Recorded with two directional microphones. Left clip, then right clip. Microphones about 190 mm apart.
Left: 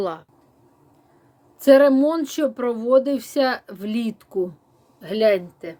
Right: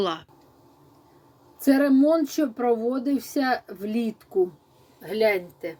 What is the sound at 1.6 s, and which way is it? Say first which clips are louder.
Speech: left 7 dB; 45° left (ahead or behind).